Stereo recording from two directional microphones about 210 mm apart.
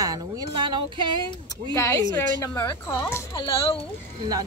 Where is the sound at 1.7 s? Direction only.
15° left (ahead or behind).